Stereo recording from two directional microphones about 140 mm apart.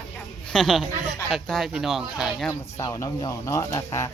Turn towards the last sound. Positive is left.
turn(degrees=25)  # may be behind; listen again after turning